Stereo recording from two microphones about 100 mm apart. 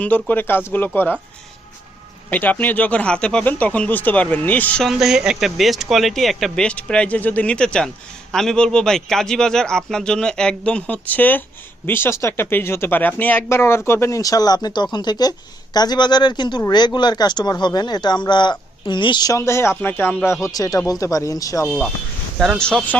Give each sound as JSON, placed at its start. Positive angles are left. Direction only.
{"t": 0.0, "sound": "speech", "side_deg": 15}
{"t": 2.3, "sound": "a man's voice", "side_deg": 15}
{"t": 4.8, "sound": "a man's voice", "side_deg": 0}
{"t": 14.2, "sound": "speech", "side_deg": 35}
{"t": 19.3, "sound": "speech", "side_deg": 25}
{"t": 22.4, "sound": "a man's voice", "side_deg": 5}